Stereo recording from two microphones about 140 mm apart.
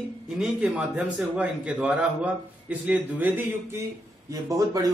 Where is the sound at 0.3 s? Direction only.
5° right (ahead or behind).